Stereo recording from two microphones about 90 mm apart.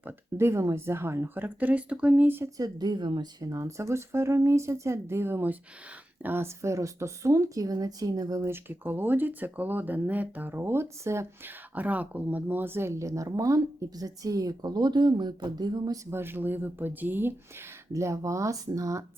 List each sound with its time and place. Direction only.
0.0 s speech: 30° right (ahead or behind)
2.6 s speech: 45° right (ahead or behind)
3.5 s speech: 35° right (ahead or behind)
8.7 s speech: 25° right (ahead or behind)
11.7 s speech: 20° right (ahead or behind); by 16.0 s 50° right (ahead or behind)
16.0 s speech: 25° right (ahead or behind)
17.9 s speech: 35° right (ahead or behind)